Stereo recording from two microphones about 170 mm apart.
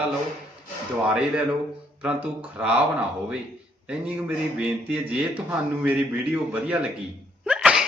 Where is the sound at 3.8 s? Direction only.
10° right (ahead or behind).